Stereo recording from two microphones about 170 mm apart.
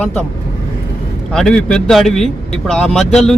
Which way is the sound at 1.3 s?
5° left (ahead or behind).